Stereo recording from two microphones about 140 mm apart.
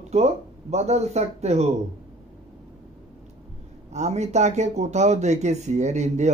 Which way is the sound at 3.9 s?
55° right (ahead or behind).